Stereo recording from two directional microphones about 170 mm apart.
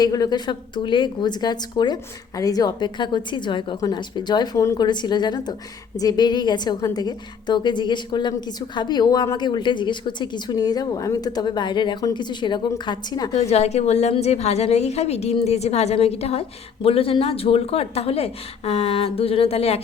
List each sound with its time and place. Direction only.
0.0 s a woman's voice: 20° left (ahead or behind)
13.3 s a woman's voice: 40° left (ahead or behind)